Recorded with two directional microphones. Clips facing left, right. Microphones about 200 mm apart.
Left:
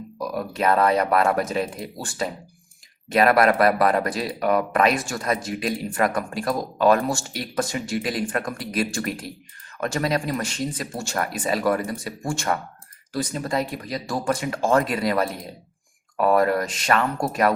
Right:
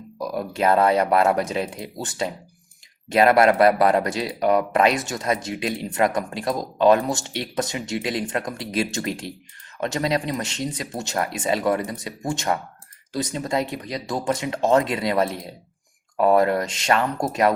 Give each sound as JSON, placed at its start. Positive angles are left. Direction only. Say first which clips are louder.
{"t": 0.3, "sound": "speech", "louder": "right 2 dB", "side_deg": -25}